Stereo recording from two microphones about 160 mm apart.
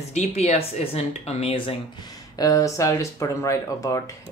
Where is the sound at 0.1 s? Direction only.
45° left (ahead or behind).